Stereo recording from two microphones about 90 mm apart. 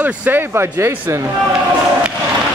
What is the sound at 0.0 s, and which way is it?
Speech, 20° right (ahead or behind).